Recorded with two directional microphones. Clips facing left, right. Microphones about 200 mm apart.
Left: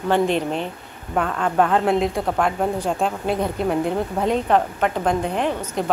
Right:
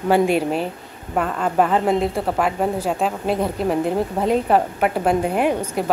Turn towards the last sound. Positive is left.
turn(degrees=-10)  # may be behind; listen again after turning